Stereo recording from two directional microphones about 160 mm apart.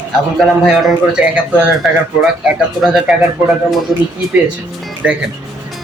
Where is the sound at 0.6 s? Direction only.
Centre (ahead or behind).